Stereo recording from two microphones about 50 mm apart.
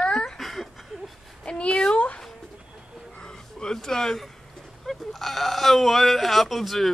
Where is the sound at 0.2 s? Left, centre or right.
Centre.